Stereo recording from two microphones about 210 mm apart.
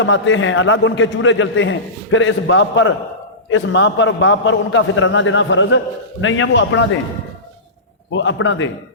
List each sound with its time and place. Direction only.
0.0 s a man's voice: 65° left (ahead or behind)
8.1 s a man's voice: 65° left (ahead or behind)